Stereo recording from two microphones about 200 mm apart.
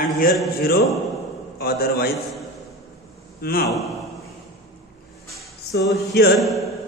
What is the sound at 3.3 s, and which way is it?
Speech, 50° left (ahead or behind).